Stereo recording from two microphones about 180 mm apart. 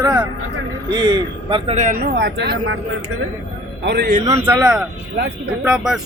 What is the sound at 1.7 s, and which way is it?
Speech, 45° right (ahead or behind).